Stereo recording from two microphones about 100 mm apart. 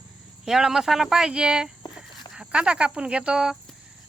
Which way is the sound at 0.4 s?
5° right (ahead or behind).